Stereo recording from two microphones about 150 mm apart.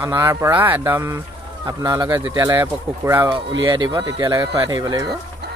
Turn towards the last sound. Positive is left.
turn(degrees=-25)  # may be behind; listen again after turning